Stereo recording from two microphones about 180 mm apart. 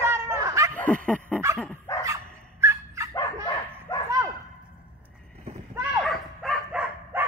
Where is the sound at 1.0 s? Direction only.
5° left (ahead or behind).